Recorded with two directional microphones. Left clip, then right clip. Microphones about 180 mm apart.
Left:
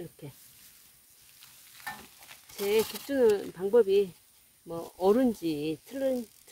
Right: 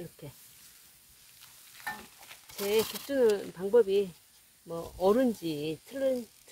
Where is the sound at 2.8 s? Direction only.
10° left (ahead or behind).